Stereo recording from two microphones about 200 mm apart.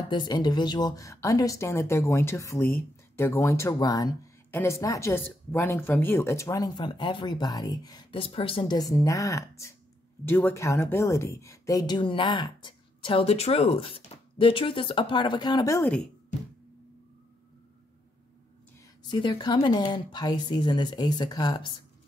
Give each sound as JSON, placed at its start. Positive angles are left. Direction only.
{"t": 0.1, "sound": "a woman's voice", "side_deg": 20}
{"t": 19.0, "sound": "a woman's voice", "side_deg": 20}